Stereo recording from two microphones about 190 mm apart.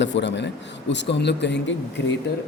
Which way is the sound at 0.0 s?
70° left (ahead or behind).